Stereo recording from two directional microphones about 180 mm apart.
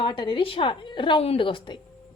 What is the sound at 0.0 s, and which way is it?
A woman's voice, 25° left (ahead or behind).